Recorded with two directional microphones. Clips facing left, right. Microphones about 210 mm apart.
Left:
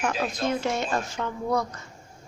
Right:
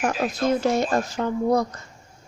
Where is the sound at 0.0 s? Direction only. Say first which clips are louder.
Right 4 dB; 40° right (ahead or behind).